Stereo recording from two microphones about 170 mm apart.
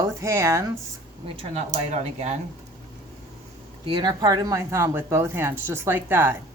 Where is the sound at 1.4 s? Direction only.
40° right (ahead or behind).